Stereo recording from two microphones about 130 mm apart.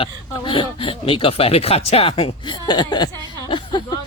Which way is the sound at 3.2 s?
35° left (ahead or behind).